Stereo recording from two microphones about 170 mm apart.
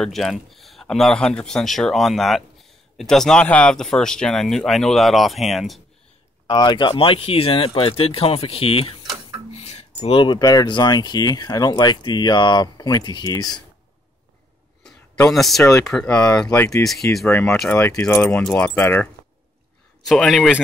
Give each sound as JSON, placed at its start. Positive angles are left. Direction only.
{"t": 0.0, "sound": "speech", "side_deg": 0}
{"t": 6.4, "sound": "speech", "side_deg": 25}
{"t": 15.3, "sound": "speech", "side_deg": 0}
{"t": 16.4, "sound": "speech", "side_deg": 20}
{"t": 20.0, "sound": "speech", "side_deg": 0}